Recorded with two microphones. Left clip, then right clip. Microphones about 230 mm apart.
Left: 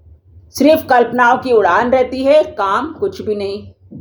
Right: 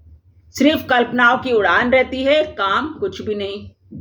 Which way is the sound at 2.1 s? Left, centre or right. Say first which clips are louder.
Left 5 dB; left.